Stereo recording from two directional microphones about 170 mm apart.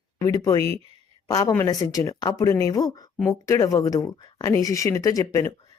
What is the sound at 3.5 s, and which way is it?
Speech, 20° left (ahead or behind).